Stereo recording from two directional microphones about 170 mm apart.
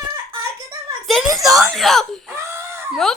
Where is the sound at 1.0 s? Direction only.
Centre (ahead or behind).